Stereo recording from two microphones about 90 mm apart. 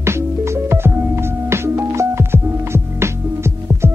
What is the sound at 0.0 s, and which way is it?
Music, 30° right (ahead or behind).